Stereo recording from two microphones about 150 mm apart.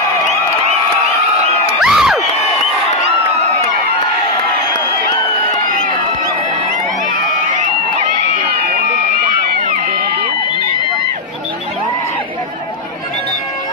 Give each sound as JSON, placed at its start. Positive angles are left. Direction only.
{"t": 1.8, "sound": "crowd", "side_deg": -5}
{"t": 8.7, "sound": "crowd", "side_deg": -60}